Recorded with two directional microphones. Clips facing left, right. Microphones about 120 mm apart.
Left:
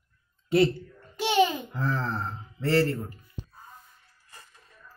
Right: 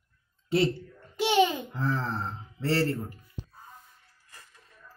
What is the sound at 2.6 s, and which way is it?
Speech, 30° right (ahead or behind).